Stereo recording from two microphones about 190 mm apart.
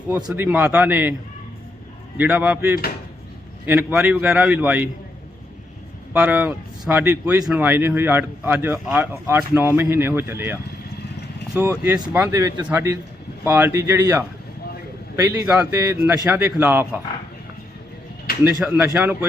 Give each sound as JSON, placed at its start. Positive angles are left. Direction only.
{"t": 0.3, "sound": "speech", "side_deg": -10}
{"t": 2.1, "sound": "speech", "side_deg": -10}
{"t": 6.1, "sound": "speech", "side_deg": -10}
{"t": 18.4, "sound": "speech", "side_deg": -5}